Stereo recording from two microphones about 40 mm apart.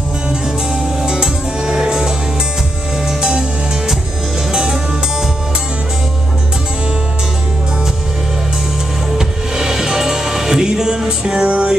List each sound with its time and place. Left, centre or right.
1.0 s music: centre
9.2 s music: centre